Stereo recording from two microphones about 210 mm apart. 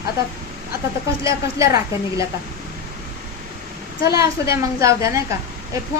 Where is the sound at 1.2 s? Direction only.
15° right (ahead or behind).